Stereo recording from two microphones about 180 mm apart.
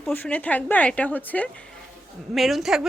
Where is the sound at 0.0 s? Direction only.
10° left (ahead or behind).